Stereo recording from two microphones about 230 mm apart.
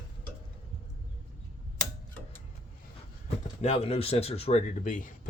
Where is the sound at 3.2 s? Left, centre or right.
Left.